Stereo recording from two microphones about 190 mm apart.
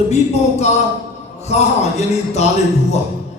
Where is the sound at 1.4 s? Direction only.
35° left (ahead or behind).